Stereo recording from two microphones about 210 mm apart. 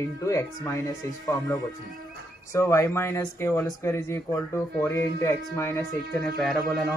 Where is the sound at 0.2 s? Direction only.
15° left (ahead or behind).